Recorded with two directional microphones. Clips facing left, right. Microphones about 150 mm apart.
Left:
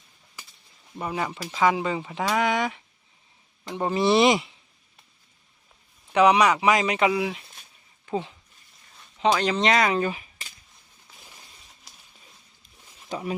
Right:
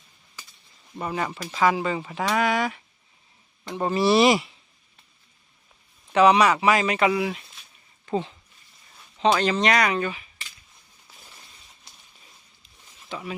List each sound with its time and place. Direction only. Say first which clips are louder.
1.0 s speech: right 1 dB; 10° left (ahead or behind)
6.1 s speech: right 1 dB; 15° left (ahead or behind)
9.4 s speech: even; 20° left (ahead or behind); by 10.5 s 35° left (ahead or behind)
11.2 s a sound: even; 10° left (ahead or behind)
13.1 s speech: left 3 dB; 40° left (ahead or behind)